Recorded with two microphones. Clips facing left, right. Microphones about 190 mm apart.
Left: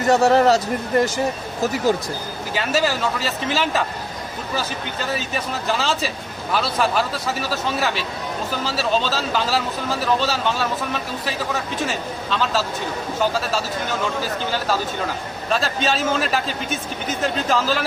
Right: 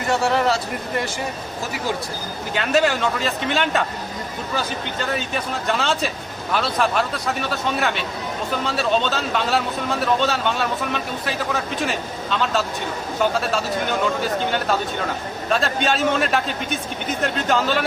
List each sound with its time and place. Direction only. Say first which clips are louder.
0.1 s speech: left 5 dB; 40° left (ahead or behind)
2.6 s speech: right 2 dB; 5° left (ahead or behind)
5.1 s speech: even; centre (ahead or behind)
15.4 s speech: right 1 dB; centre (ahead or behind)